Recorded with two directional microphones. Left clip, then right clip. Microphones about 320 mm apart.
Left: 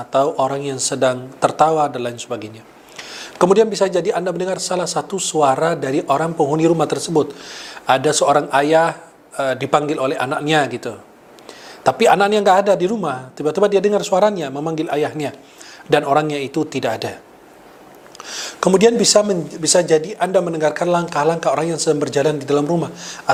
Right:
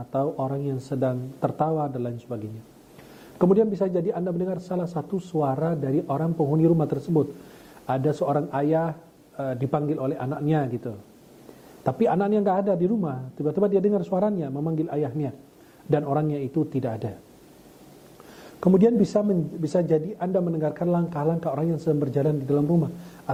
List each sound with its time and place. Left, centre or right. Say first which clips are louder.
0.0 s speech: left 10 dB; centre
6.9 s speech: left 7 dB; left
7.9 s speech: left 10 dB; centre
18.4 s speech: left 7 dB; centre